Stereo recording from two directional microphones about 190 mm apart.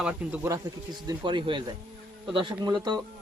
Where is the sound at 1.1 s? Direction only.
25° right (ahead or behind).